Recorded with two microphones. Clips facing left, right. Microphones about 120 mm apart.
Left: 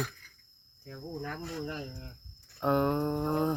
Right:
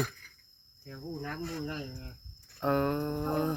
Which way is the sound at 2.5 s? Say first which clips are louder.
Left 1 dB; 15° left (ahead or behind).